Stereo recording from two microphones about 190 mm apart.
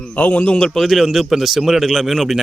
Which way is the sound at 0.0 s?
5° left (ahead or behind).